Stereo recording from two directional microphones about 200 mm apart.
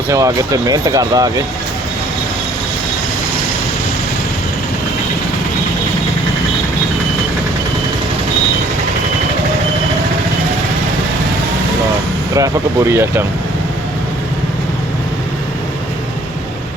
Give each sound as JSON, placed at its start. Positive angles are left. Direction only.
{"t": 0.1, "sound": "speech", "side_deg": -15}
{"t": 12.3, "sound": "speech", "side_deg": -15}